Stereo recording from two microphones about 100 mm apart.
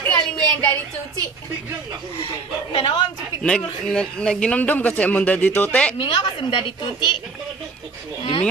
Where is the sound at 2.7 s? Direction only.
55° left (ahead or behind).